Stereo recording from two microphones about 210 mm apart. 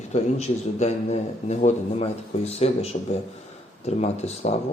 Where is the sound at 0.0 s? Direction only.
30° left (ahead or behind).